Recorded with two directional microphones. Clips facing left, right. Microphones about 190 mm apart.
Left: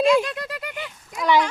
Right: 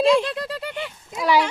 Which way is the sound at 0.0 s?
30° right (ahead or behind).